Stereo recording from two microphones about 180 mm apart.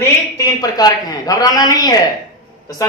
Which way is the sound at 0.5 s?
20° left (ahead or behind).